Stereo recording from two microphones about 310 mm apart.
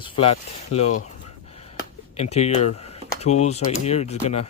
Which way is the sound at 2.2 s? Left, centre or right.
Left.